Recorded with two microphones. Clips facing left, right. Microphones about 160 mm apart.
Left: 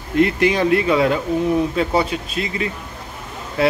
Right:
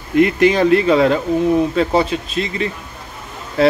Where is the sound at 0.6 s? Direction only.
35° right (ahead or behind).